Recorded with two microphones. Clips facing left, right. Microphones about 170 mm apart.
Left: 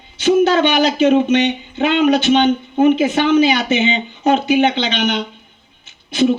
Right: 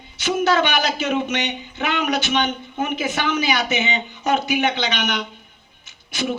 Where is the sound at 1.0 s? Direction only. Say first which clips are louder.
Left 10 dB; 30° left (ahead or behind).